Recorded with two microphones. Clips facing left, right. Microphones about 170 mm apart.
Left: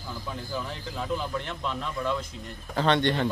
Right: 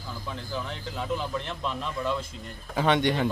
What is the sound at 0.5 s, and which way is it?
A man's voice, 5° left (ahead or behind).